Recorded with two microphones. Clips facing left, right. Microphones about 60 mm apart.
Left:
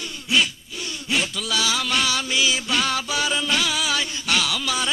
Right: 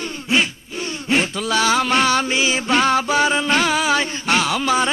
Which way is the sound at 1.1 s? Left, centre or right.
Right.